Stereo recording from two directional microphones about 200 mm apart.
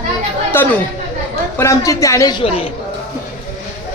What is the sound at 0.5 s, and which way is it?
A man's voice, 10° left (ahead or behind).